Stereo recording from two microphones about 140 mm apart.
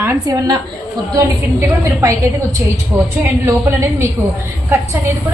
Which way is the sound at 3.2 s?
20° right (ahead or behind).